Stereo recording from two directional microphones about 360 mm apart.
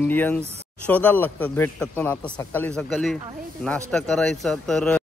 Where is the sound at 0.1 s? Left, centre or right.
Centre.